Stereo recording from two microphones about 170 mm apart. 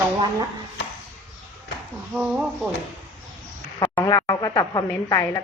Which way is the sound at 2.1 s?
5° right (ahead or behind).